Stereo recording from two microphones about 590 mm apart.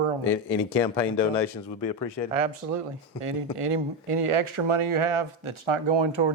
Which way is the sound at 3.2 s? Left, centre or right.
Right.